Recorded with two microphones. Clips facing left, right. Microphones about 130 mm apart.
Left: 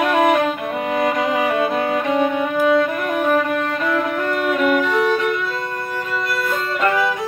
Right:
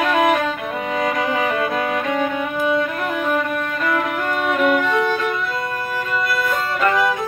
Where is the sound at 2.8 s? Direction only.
30° left (ahead or behind).